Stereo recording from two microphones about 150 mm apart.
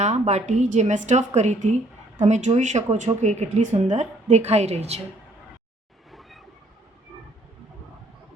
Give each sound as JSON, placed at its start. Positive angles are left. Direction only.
{"t": 0.0, "sound": "speech", "side_deg": -45}
{"t": 6.1, "sound": "train", "side_deg": 0}